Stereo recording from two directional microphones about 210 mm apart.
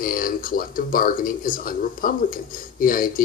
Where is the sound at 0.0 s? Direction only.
40° left (ahead or behind).